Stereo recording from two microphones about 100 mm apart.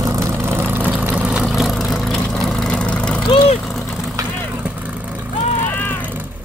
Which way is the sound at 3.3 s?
70° left (ahead or behind).